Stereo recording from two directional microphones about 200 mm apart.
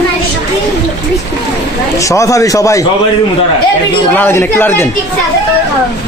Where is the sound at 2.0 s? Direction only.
15° left (ahead or behind).